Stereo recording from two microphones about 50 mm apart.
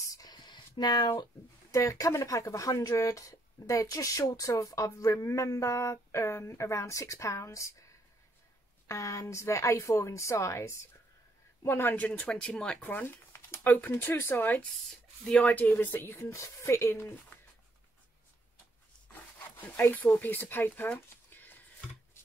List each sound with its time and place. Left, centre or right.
1.7 s speech: left
8.8 s a woman's voice: left
11.6 s speech: left
12.1 s speech: centre
12.8 s a sound: left
13.8 s speech: left
14.3 s speech: left
14.7 s speech: centre
15.2 s speech: left
19.8 s speech: left
21.3 s a sound: left